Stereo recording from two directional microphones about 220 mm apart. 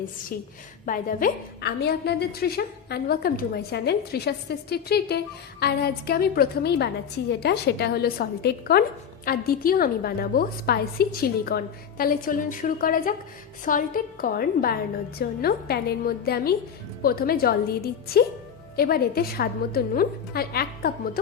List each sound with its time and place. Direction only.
0.9 s a woman's voice: 40° left (ahead or behind)